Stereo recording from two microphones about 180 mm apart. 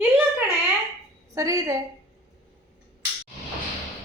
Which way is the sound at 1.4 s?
15° right (ahead or behind).